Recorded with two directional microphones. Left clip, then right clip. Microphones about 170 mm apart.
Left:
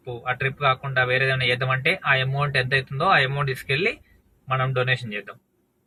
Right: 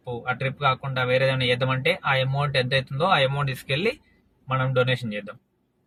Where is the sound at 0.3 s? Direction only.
25° right (ahead or behind).